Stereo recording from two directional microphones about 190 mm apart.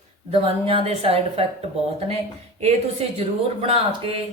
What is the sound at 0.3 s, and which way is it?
A woman's voice, 30° right (ahead or behind).